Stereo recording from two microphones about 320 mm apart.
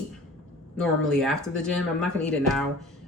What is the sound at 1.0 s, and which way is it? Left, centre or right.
Speech, centre.